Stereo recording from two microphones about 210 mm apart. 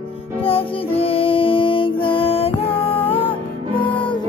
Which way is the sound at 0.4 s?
25° left (ahead or behind).